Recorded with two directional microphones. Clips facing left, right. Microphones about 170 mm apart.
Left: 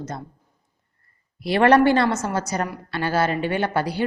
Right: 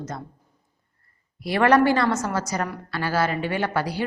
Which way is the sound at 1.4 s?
25° left (ahead or behind).